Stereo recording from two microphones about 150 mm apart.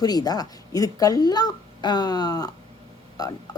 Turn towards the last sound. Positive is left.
turn(degrees=25)  # may be behind; listen again after turning